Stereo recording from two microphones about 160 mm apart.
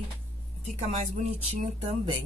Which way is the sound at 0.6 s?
45° right (ahead or behind).